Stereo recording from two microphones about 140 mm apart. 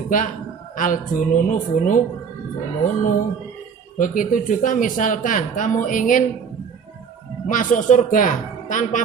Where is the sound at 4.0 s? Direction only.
70° left (ahead or behind).